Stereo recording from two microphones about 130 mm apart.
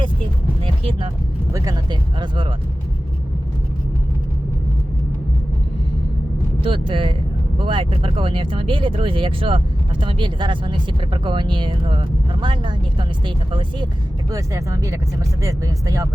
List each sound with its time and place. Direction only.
0.6 s a sound: 45° right (ahead or behind)
1.5 s speech: 30° right (ahead or behind)
6.6 s speech: 40° right (ahead or behind); by 16.0 s 25° right (ahead or behind)